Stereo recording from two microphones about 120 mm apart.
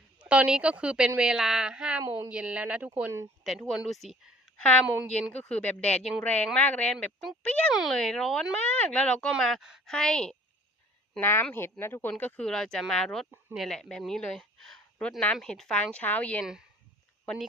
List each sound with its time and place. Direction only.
0.2 s a woman's voice: 10° right (ahead or behind); by 7.7 s 10° left (ahead or behind)
7.7 s a woman's voice: centre (ahead or behind)
11.2 s a woman's voice: 20° left (ahead or behind)